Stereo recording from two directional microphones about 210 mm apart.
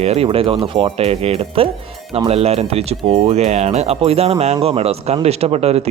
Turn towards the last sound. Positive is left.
turn(degrees=-30)  # may be behind; listen again after turning